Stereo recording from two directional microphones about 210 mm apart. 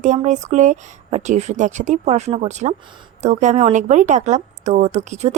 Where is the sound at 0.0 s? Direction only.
35° right (ahead or behind).